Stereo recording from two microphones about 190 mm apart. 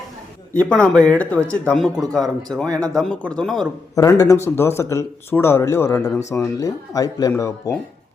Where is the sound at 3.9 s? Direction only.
20° left (ahead or behind).